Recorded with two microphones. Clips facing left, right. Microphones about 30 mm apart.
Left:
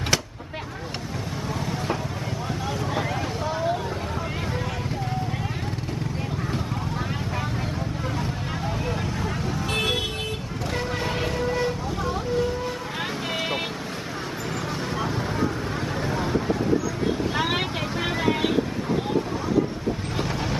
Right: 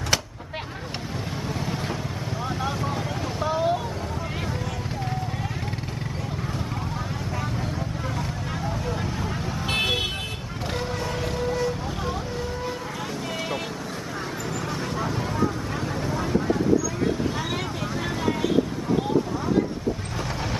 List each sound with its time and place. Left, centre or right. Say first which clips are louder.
3.4 s vehicle: right 3 dB; centre
15.0 s vehicle: left 1 dB; centre
16.0 s vehicle: even; left
17.4 s vehicle: left 4 dB; left